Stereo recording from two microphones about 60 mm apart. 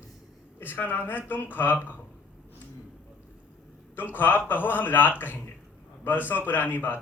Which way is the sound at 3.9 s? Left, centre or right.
Left.